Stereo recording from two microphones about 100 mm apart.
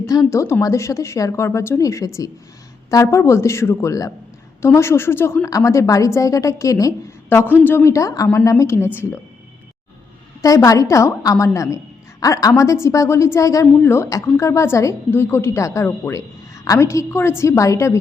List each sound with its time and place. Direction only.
0.0 s a woman's voice: 35° left (ahead or behind)
7.3 s a woman's voice: 20° left (ahead or behind)
7.9 s a woman's voice: 35° left (ahead or behind)
10.4 s a woman's voice: 35° left (ahead or behind)